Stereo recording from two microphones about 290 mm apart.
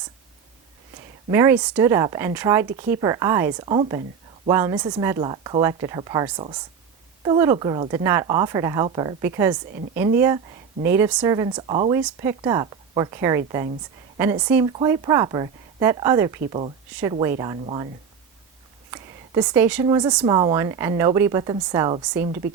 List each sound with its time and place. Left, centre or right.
1.3 s speech: centre
18.9 s speech: centre